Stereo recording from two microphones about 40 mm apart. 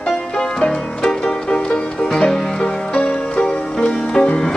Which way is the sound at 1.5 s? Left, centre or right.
Centre.